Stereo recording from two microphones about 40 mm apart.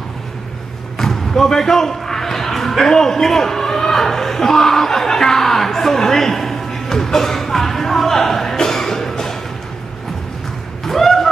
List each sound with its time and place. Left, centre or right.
0.9 s basketball bounce: centre
10.9 s fowl: centre